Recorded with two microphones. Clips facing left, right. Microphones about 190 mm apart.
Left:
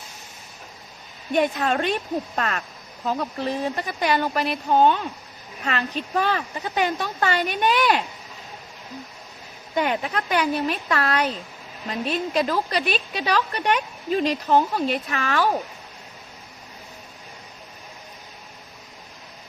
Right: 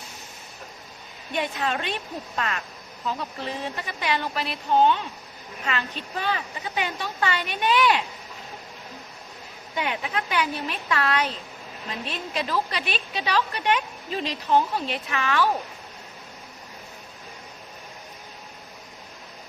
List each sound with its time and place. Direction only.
1.3 s a woman's voice: 45° left (ahead or behind)
9.7 s a woman's voice: 45° left (ahead or behind)